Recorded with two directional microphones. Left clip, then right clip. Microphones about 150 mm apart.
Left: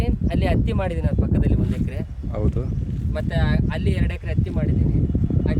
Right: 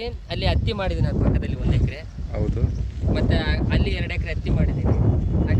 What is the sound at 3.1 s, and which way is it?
Speech, 65° left (ahead or behind).